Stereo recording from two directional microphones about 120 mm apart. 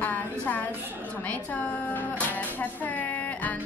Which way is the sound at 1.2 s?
15° left (ahead or behind).